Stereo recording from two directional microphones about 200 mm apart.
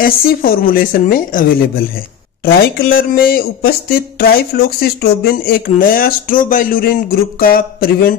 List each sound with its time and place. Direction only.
0.0 s speech: 45° left (ahead or behind)